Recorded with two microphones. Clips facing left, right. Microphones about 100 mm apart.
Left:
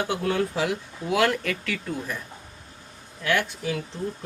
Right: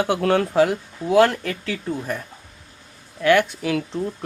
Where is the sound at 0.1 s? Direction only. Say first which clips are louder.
Right 6 dB; 75° right (ahead or behind).